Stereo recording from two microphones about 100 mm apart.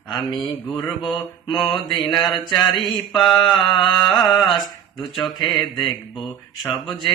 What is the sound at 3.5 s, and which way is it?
Mantra, 55° left (ahead or behind).